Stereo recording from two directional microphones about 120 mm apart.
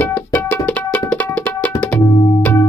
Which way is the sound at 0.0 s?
10° left (ahead or behind).